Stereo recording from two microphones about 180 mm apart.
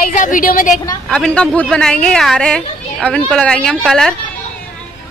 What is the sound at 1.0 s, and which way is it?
Speech, 5° left (ahead or behind).